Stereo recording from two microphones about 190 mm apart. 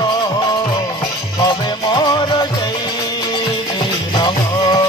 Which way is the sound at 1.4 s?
25° left (ahead or behind).